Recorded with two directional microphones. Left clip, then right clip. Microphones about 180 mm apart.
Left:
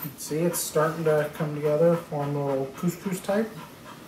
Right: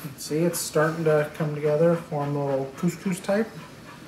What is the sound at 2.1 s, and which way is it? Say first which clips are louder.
Speech: right 1 dB; 20° right (ahead or behind).